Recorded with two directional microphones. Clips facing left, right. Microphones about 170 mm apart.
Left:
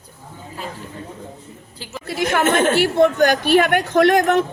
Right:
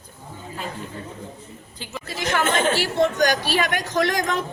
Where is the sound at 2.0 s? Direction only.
55° left (ahead or behind).